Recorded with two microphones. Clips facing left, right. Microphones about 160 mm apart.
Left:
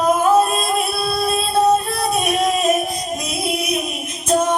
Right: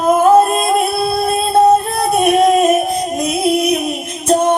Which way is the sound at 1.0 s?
55° right (ahead or behind).